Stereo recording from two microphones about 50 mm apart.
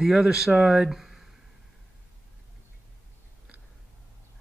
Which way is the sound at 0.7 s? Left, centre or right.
Centre.